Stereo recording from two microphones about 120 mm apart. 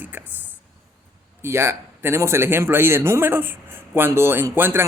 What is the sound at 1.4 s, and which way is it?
A man's voice, 20° right (ahead or behind).